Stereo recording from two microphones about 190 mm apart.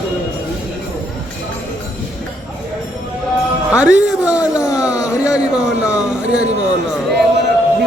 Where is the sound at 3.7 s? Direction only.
5° right (ahead or behind).